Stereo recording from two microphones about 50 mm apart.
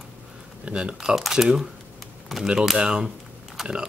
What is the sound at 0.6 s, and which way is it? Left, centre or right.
Speech, right.